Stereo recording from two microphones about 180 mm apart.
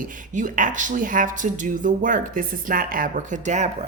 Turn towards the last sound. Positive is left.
turn(degrees=-40)  # may be behind; listen again after turning